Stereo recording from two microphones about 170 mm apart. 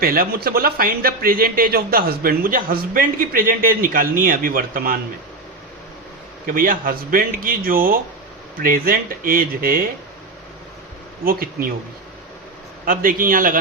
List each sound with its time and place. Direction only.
0.0 s speech: 60° right (ahead or behind)
6.4 s speech: 55° right (ahead or behind)
12.8 s speech: 55° right (ahead or behind)